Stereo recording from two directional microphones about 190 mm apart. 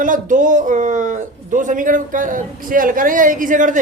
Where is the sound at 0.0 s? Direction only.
45° right (ahead or behind).